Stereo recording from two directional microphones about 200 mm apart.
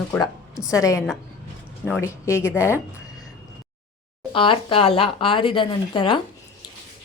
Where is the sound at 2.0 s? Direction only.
15° left (ahead or behind).